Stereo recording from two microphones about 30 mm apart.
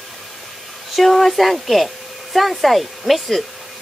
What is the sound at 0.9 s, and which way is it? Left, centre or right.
Speech, centre.